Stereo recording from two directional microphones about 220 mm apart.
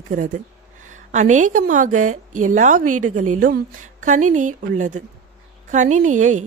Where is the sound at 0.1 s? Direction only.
35° right (ahead or behind).